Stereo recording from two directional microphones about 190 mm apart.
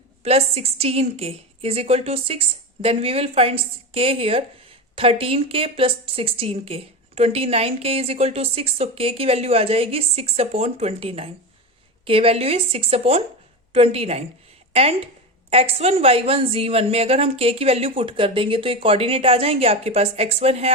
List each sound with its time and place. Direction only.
0.2 s a woman's voice: 30° right (ahead or behind)